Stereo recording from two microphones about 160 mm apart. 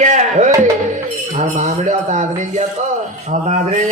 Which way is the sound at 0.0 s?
50° right (ahead or behind).